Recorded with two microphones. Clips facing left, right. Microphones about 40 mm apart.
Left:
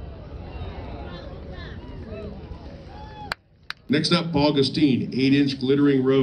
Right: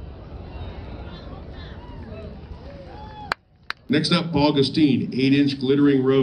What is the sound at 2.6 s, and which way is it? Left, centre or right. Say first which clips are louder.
Boat: right 2 dB; centre.